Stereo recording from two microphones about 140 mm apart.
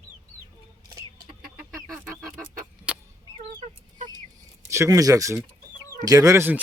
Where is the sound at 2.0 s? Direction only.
20° right (ahead or behind).